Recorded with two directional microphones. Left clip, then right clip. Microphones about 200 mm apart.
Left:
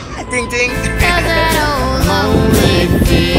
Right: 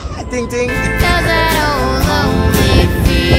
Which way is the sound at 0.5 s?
55° right (ahead or behind).